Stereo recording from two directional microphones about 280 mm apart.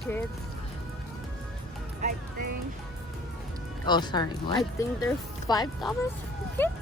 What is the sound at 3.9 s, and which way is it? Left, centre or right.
Speech, centre.